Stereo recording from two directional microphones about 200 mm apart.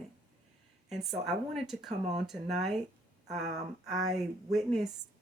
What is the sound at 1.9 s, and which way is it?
Speech, 35° right (ahead or behind).